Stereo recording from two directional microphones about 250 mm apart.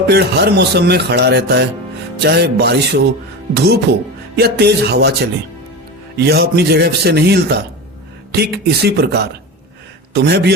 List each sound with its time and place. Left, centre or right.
0.1 s speech: right
10.2 s speech: right